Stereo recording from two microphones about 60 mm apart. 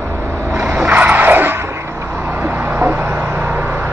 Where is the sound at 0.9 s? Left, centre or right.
Right.